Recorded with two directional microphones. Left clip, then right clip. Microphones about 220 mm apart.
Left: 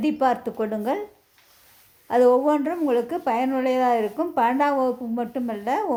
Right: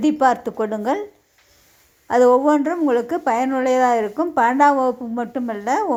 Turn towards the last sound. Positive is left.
turn(degrees=-15)  # may be behind; listen again after turning